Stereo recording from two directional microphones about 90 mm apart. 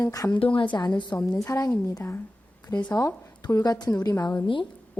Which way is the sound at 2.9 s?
40° left (ahead or behind).